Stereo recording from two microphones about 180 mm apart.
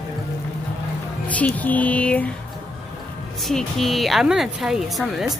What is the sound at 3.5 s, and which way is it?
Speech, centre (ahead or behind).